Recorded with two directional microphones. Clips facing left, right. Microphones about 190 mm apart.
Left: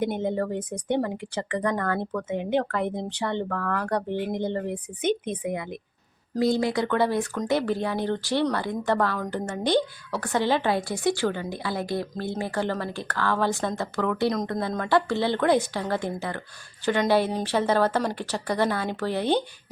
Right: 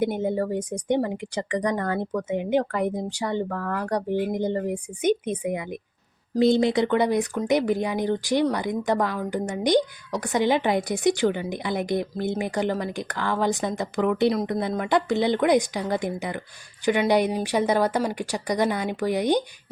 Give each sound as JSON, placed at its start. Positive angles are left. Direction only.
{"t": 0.0, "sound": "a woman's voice", "side_deg": -10}
{"t": 6.4, "sound": "a woman's voice", "side_deg": -25}